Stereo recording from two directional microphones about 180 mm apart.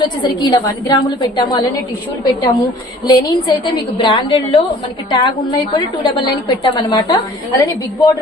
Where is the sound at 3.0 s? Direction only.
20° left (ahead or behind).